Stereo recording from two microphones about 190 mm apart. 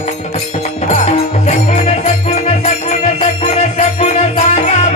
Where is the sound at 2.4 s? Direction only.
35° left (ahead or behind).